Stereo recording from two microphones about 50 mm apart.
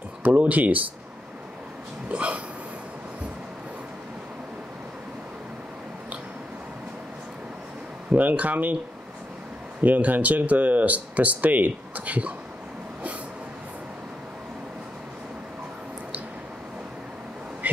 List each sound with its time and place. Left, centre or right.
0.2 s speech: right
2.0 s hiccup: right
8.1 s speech: right
9.8 s speech: right